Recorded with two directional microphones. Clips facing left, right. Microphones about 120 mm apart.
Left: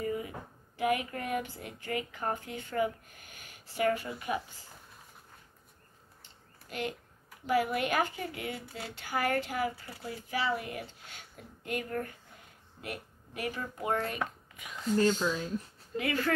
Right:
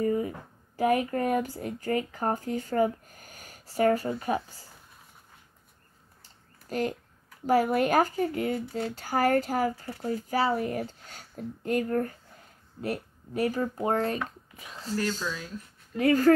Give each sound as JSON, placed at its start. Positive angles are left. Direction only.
{"t": 0.0, "sound": "a sound", "side_deg": -35}
{"t": 0.7, "sound": "speech", "side_deg": -35}
{"t": 6.2, "sound": "a sound", "side_deg": -40}
{"t": 7.4, "sound": "speech", "side_deg": -40}
{"t": 15.2, "sound": "speech", "side_deg": 35}
{"t": 16.0, "sound": "speech", "side_deg": -40}